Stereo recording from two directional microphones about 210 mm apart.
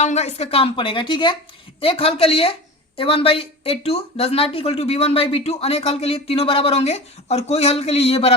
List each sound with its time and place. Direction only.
0.0 s speech: 30° left (ahead or behind)